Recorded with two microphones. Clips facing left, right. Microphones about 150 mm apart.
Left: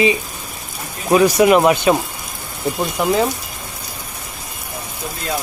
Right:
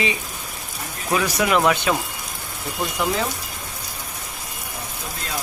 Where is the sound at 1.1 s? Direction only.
30° left (ahead or behind).